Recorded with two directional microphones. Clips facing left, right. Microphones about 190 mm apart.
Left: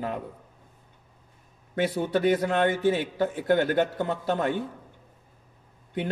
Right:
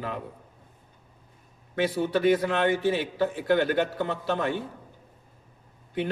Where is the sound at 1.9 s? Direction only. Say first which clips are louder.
Right 1 dB; 50° left (ahead or behind).